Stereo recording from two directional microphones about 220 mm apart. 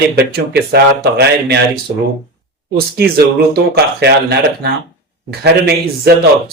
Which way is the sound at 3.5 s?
45° right (ahead or behind).